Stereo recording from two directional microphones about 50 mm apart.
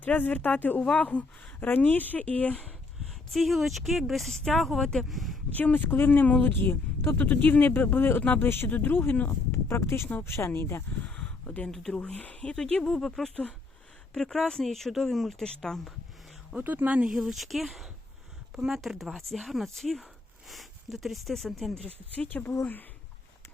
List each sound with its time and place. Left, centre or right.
0.0 s speech: left
1.6 s speech: left
3.2 s speech: centre
5.5 s speech: left
8.7 s speech: left
9.6 s speech: left
11.0 s a sound: left
11.4 s speech: left
11.7 s speech: centre
11.9 s speech: left
16.7 s speech: right
17.2 s speech: centre
18.5 s speech: centre
22.3 s speech: left